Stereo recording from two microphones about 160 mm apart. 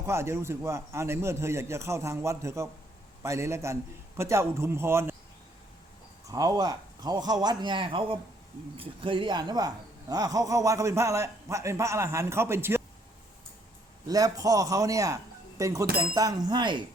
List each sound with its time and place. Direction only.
0.0 s a man's voice: 15° right (ahead or behind)
6.2 s a man's voice: 20° right (ahead or behind)
14.1 s a man's voice: 25° right (ahead or behind)